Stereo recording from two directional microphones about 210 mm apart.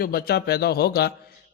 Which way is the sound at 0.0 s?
45° left (ahead or behind).